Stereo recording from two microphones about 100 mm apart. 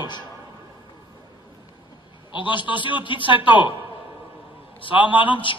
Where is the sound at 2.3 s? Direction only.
55° left (ahead or behind).